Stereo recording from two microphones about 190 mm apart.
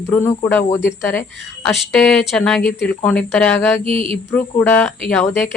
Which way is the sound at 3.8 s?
30° right (ahead or behind).